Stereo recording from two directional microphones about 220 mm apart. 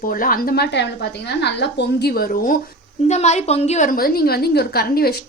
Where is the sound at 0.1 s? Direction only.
40° left (ahead or behind).